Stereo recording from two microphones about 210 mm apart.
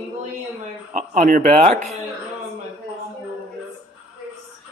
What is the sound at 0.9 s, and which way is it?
Speech, 40° right (ahead or behind).